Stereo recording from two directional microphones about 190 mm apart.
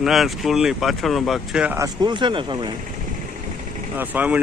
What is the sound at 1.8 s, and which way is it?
Speech, 25° right (ahead or behind).